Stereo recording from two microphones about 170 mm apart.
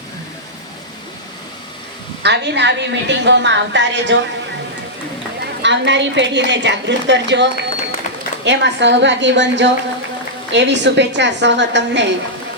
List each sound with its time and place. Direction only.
2.2 s a woman's voice: 90° right
5.6 s a woman's voice: 90° right